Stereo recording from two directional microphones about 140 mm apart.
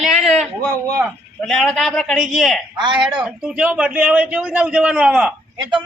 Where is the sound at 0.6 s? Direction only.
25° right (ahead or behind).